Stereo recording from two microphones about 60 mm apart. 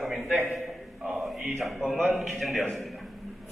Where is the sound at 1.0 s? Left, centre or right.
Centre.